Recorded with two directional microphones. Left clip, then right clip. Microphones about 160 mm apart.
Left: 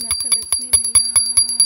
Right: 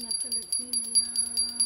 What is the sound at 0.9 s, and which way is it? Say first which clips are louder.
Music: left 9 dB; 45° left (ahead or behind).